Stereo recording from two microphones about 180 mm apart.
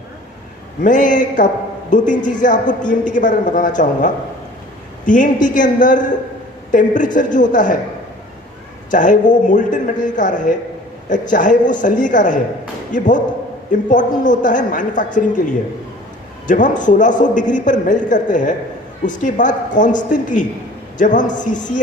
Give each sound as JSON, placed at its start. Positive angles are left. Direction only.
{"t": 0.9, "sound": "a woman's voice", "side_deg": 45}
{"t": 8.9, "sound": "a woman's voice", "side_deg": 45}